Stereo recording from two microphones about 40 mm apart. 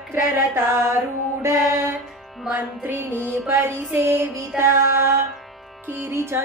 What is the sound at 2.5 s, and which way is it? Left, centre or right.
Music, right.